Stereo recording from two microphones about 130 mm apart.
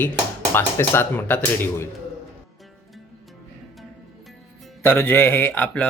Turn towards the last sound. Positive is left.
turn(degrees=10)  # may be behind; listen again after turning